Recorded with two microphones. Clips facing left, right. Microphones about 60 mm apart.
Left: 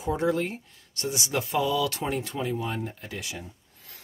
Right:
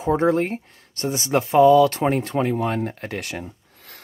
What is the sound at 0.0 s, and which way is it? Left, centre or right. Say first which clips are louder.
Speech: right 7 dB; right.